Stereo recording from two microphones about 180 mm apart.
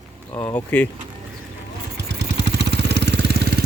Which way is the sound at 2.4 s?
70° right (ahead or behind).